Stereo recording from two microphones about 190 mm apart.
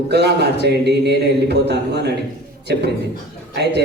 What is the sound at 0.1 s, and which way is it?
A man's voice, 60° right (ahead or behind).